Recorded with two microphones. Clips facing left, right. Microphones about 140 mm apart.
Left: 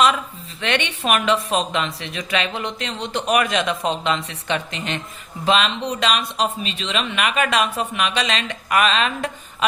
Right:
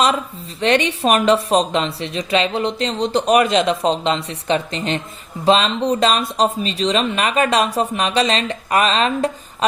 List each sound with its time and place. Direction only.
0.6 s speech: 35° right (ahead or behind)